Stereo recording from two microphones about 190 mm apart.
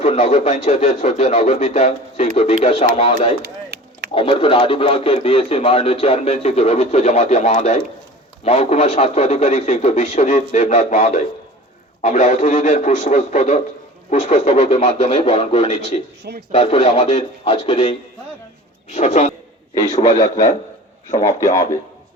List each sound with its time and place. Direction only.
0.0 s speech: 40° left (ahead or behind)
3.4 s chop: 60° right (ahead or behind)
4.1 s speech: 30° left (ahead or behind)
21.2 s a man's voice: 15° left (ahead or behind)